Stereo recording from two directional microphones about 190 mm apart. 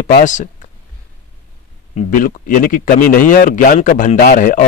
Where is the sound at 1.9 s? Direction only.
45° left (ahead or behind).